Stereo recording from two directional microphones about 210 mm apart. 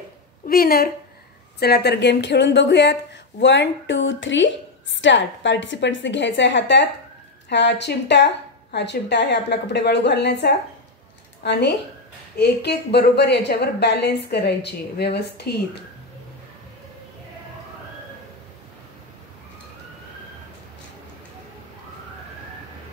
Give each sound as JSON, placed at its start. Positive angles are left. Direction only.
{"t": 0.5, "sound": "a woman's voice", "side_deg": 45}